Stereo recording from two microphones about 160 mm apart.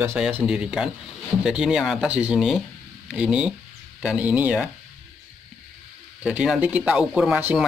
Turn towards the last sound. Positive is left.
turn(degrees=-10)  # may be behind; listen again after turning